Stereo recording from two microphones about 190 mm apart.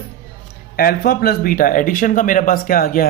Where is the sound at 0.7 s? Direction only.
50° left (ahead or behind).